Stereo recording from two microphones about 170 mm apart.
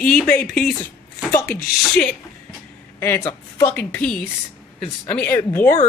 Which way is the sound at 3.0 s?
15° left (ahead or behind).